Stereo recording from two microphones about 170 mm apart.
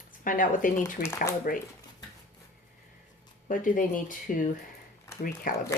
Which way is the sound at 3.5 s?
50° left (ahead or behind).